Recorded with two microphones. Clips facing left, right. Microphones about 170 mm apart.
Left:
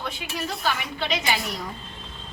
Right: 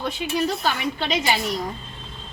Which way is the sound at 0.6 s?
30° right (ahead or behind).